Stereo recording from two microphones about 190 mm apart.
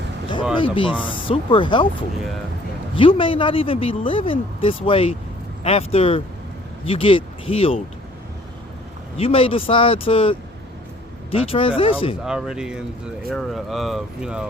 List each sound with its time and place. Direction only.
0.5 s speech: 25° left (ahead or behind)
2.9 s speech: 30° left (ahead or behind)
9.1 s speech: 30° left (ahead or behind)
12.2 s speech: 5° right (ahead or behind)